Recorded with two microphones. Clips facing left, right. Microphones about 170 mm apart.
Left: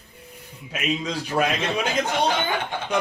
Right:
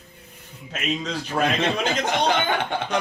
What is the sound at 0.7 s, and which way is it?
Speech, 10° left (ahead or behind).